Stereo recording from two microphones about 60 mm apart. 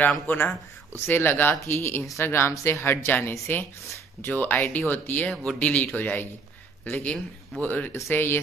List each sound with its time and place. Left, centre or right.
0.3 s speech: left
5.3 s speech: centre
5.6 s speech: left